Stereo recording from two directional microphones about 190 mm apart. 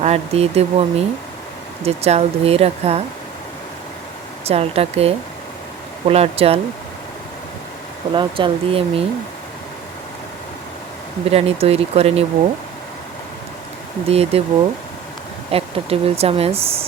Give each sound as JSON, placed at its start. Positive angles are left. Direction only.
{"t": 0.0, "sound": "speech", "side_deg": -35}
{"t": 4.4, "sound": "speech", "side_deg": -30}
{"t": 8.1, "sound": "speech", "side_deg": -25}
{"t": 11.3, "sound": "speech", "side_deg": -30}
{"t": 14.1, "sound": "speech", "side_deg": -30}
{"t": 15.5, "sound": "speech", "side_deg": -30}